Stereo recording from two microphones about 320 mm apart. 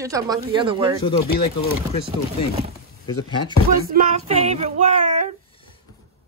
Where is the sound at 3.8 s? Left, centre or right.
Right.